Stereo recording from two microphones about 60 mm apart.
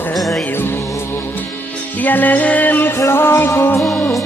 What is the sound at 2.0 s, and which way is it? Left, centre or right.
Music, left.